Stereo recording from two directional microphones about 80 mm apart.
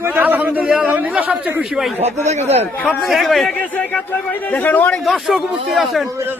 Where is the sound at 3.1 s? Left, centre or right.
Centre.